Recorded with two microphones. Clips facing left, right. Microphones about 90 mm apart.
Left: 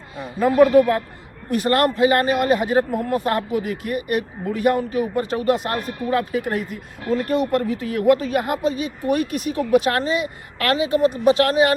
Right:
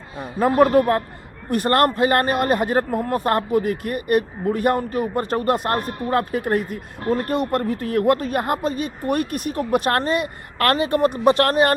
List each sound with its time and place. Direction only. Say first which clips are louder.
0.2 s speech: left 1 dB; 40° right (ahead or behind)